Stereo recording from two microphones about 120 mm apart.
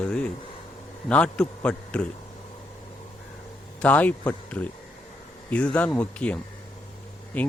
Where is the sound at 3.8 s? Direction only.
10° left (ahead or behind).